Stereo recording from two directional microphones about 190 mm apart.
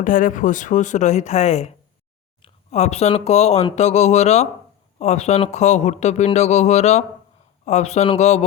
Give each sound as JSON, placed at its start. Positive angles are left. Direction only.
{"t": 0.0, "sound": "speech", "side_deg": 45}